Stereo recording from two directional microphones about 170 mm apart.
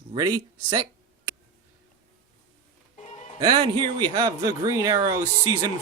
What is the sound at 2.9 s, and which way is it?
Music, 40° left (ahead or behind).